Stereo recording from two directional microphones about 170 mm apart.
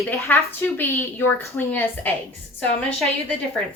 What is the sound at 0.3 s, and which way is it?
A woman's voice, 10° left (ahead or behind).